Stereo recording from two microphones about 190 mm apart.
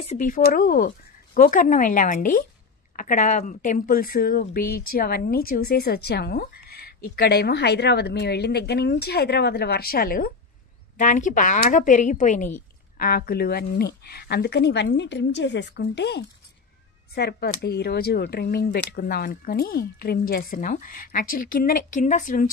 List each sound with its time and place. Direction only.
0.1 s a woman's voice: 45° left (ahead or behind)